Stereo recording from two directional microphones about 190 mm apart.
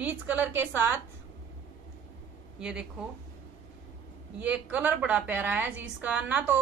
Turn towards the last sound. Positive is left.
turn(degrees=-5)  # may be behind; listen again after turning